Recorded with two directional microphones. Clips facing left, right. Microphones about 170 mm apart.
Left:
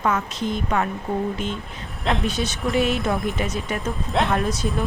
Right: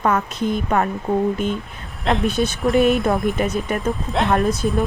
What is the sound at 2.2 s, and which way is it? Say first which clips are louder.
Speech: right 5 dB; 55° right (ahead or behind).